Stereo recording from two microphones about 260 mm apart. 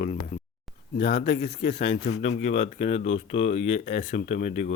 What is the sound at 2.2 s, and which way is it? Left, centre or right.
Speech, left.